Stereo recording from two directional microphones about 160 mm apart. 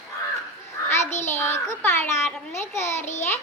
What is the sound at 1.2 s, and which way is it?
A child's voice, 15° left (ahead or behind).